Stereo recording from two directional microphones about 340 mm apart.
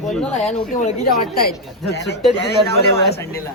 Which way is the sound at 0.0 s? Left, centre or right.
Centre.